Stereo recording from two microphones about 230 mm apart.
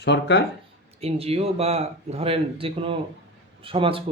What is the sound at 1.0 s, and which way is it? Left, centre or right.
Speech, right.